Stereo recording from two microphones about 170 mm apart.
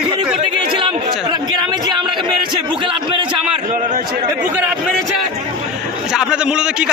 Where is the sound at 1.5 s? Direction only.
25° right (ahead or behind).